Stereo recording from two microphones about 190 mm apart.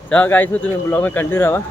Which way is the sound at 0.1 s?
10° left (ahead or behind).